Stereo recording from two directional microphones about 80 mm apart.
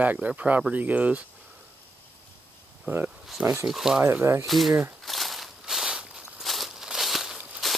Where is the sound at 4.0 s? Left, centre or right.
Right.